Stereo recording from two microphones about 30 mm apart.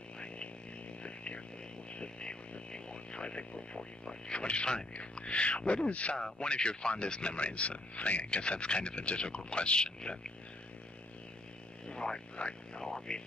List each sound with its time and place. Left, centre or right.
1.0 s a sound: left
5.1 s a man's voice: left
6.4 s speech: left
11.9 s a sound: left
12.4 s speech: left
12.8 s speech: centre